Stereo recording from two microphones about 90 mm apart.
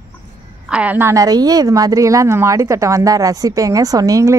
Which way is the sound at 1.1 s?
45° right (ahead or behind).